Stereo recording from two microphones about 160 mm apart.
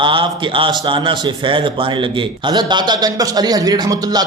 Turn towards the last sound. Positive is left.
turn(degrees=-25)  # may be behind; listen again after turning